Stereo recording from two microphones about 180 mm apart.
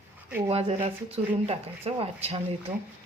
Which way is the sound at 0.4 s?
30° right (ahead or behind).